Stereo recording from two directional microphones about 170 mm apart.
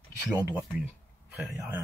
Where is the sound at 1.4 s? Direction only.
15° right (ahead or behind).